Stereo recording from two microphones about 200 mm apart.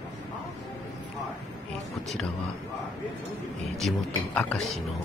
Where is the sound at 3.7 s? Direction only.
5° left (ahead or behind).